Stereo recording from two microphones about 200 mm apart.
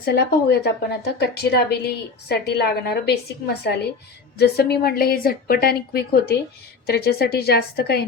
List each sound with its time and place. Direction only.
0.0 s a woman's voice: 55° left (ahead or behind)